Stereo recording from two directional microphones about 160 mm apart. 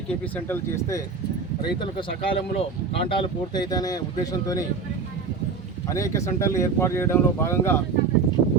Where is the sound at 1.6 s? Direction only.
30° left (ahead or behind).